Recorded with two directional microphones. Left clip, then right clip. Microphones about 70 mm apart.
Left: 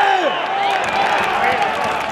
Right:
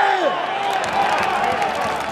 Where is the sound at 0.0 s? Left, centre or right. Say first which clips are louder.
Left 2 dB; left.